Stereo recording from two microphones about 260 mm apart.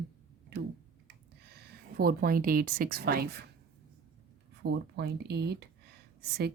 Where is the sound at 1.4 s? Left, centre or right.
Right.